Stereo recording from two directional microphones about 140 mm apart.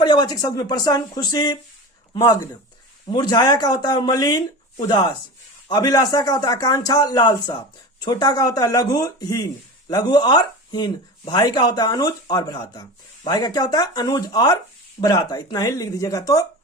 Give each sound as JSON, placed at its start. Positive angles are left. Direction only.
{"t": 0.0, "sound": "speech", "side_deg": 30}
{"t": 3.1, "sound": "speech", "side_deg": 30}